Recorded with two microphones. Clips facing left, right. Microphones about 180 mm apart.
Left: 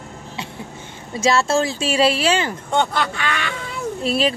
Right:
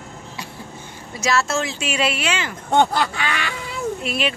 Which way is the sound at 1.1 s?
30° left (ahead or behind).